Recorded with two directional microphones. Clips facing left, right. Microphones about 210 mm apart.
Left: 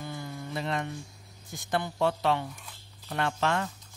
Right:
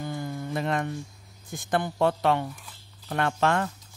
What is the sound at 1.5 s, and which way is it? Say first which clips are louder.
Speech: right 4 dB; 50° right (ahead or behind).